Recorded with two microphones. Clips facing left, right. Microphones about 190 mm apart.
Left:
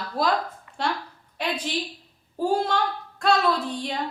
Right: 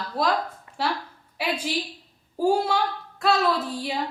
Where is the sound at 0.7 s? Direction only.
35° right (ahead or behind).